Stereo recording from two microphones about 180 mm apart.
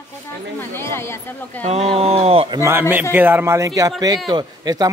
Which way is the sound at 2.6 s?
15° right (ahead or behind).